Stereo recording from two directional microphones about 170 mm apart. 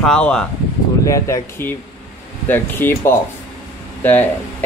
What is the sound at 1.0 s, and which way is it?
Speech, 20° left (ahead or behind).